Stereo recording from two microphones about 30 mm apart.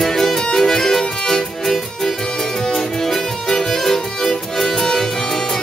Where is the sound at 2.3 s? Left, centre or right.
Centre.